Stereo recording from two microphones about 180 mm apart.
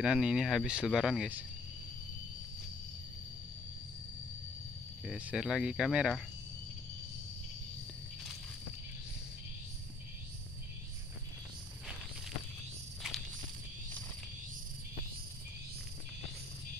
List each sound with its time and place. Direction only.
0.0 s speech: 5° right (ahead or behind)
5.0 s speech: 5° right (ahead or behind)
13.0 s walk: 5° right (ahead or behind)